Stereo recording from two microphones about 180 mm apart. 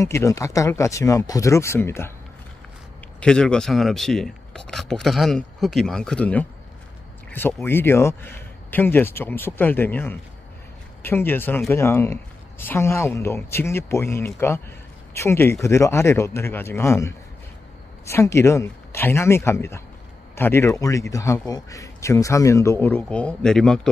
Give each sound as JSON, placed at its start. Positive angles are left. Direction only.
{"t": 0.0, "sound": "speech", "side_deg": 15}
{"t": 3.2, "sound": "speech", "side_deg": 5}